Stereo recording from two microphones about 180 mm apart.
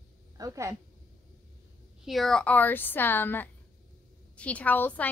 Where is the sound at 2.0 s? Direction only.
Centre (ahead or behind).